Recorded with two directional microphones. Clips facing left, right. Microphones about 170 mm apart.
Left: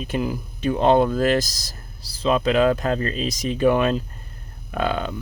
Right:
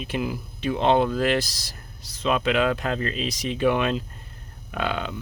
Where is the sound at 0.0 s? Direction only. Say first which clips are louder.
Left 3 dB; 40° left (ahead or behind).